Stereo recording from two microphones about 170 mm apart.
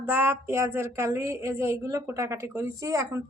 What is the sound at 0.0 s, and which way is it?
A woman's voice, 10° right (ahead or behind).